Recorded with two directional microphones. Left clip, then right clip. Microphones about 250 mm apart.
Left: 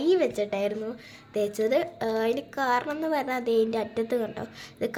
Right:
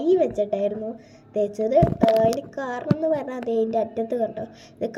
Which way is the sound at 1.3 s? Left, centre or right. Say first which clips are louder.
Right 3 dB; left.